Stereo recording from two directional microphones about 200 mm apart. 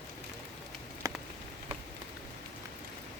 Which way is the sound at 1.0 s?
15° right (ahead or behind).